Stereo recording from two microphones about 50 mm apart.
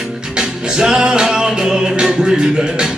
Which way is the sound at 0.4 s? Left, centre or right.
Centre.